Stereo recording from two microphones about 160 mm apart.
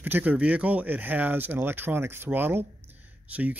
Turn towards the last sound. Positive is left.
turn(degrees=-10)  # may be behind; listen again after turning